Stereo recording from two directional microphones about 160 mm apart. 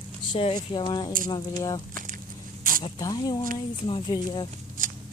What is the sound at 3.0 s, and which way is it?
Speech, 25° left (ahead or behind).